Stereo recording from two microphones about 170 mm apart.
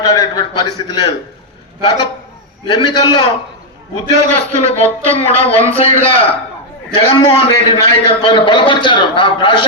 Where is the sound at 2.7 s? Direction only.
25° left (ahead or behind).